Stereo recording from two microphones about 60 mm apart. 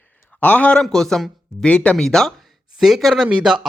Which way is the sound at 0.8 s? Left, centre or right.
Centre.